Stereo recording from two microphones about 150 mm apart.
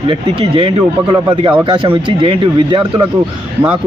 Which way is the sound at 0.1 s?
35° right (ahead or behind).